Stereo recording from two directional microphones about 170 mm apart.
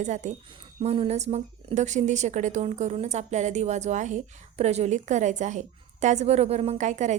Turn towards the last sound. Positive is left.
turn(degrees=-45)  # may be behind; listen again after turning